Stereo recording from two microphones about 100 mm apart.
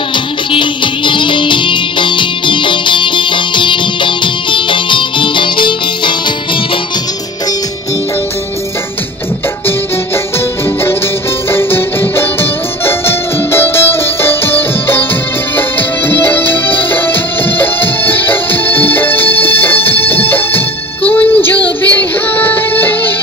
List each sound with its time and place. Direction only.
0.1 s music: 55° left (ahead or behind)
11.5 s music: 25° left (ahead or behind)
16.1 s music: 20° left (ahead or behind)
21.6 s child singing: 15° left (ahead or behind)